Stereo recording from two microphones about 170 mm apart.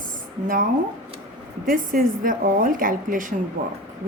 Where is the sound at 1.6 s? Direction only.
55° right (ahead or behind).